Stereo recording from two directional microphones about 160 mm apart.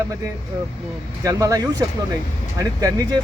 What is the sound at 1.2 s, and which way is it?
Speech, 20° right (ahead or behind).